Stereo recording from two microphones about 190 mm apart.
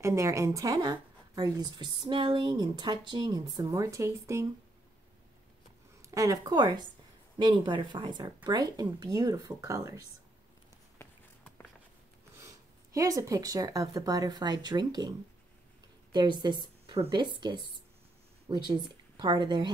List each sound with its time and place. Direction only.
0.0 s speech: 15° right (ahead or behind)
6.0 s speech: 15° right (ahead or behind)
12.9 s a woman's voice: 20° right (ahead or behind)